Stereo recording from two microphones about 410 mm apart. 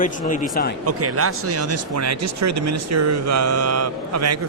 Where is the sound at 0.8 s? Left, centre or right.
Right.